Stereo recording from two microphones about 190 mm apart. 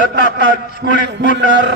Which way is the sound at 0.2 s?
45° left (ahead or behind).